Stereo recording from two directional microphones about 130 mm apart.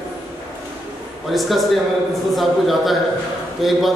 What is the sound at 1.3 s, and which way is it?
Speech, centre (ahead or behind).